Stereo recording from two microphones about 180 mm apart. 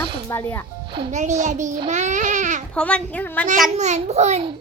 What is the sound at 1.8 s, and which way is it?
Babbling, 40° right (ahead or behind).